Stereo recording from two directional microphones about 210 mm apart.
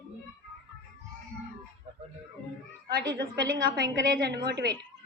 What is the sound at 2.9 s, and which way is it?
A woman's voice, 55° right (ahead or behind).